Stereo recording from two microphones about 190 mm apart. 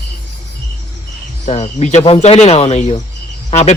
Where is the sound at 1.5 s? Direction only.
35° left (ahead or behind).